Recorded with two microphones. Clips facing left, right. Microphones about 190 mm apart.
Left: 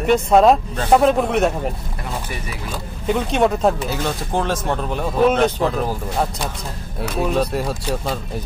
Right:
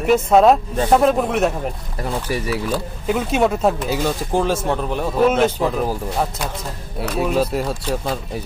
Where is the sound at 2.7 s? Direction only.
5° right (ahead or behind).